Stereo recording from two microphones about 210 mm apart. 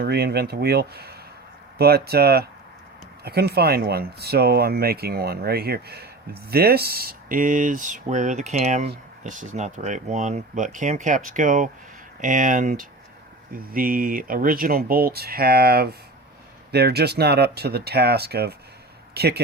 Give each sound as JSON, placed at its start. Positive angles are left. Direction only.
{"t": 0.0, "sound": "speech", "side_deg": -50}